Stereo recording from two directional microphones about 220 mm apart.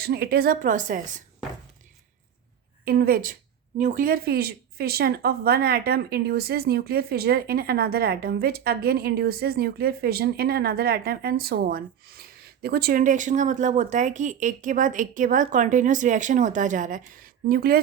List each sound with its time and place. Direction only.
0.0 s a woman's voice: 45° right (ahead or behind)
2.8 s speech: 45° right (ahead or behind)